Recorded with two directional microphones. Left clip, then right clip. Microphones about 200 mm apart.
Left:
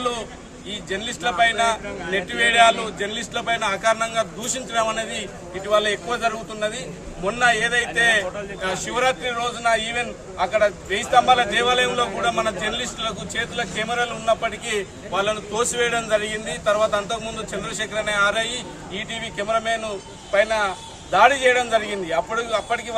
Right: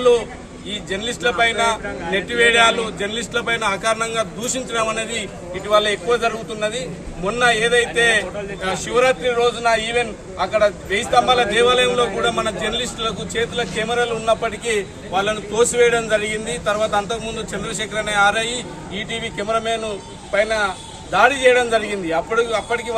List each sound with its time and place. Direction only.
0.7 s a man's voice: centre (ahead or behind)